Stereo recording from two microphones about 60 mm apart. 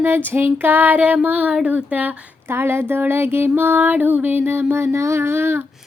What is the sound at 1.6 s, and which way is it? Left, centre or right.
Speech, right.